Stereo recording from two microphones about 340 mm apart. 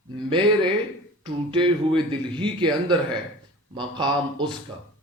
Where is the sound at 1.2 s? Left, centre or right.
Centre.